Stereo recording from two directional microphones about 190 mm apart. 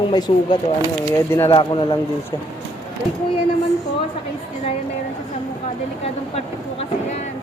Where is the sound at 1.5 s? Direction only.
30° left (ahead or behind).